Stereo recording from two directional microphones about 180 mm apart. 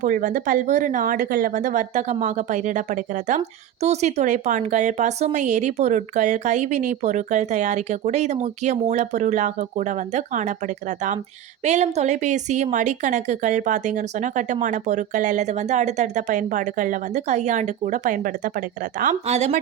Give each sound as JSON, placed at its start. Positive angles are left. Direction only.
{"t": 0.0, "sound": "a woman's voice", "side_deg": -45}
{"t": 11.6, "sound": "a woman's voice", "side_deg": -40}